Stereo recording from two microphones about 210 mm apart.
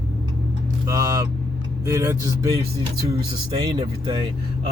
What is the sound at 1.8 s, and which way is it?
A man's voice, 15° right (ahead or behind).